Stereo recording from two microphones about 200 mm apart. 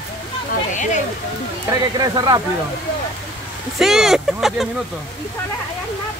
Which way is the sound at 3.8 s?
Centre (ahead or behind).